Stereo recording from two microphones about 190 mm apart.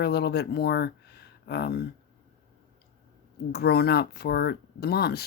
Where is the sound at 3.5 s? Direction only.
55° left (ahead or behind).